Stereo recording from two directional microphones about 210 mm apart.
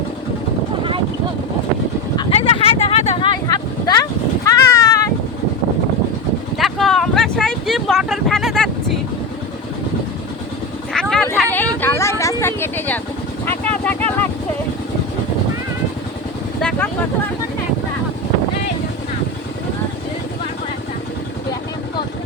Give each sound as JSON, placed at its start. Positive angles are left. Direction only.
{"t": 2.1, "sound": "a sound", "side_deg": 25}
{"t": 3.5, "sound": "vehicle", "side_deg": 15}
{"t": 4.5, "sound": "cat", "side_deg": 15}
{"t": 6.6, "sound": "vehicle", "side_deg": 0}
{"t": 10.9, "sound": "a sound", "side_deg": 5}
{"t": 13.4, "sound": "vehicle", "side_deg": 10}
{"t": 16.6, "sound": "vehicle", "side_deg": 5}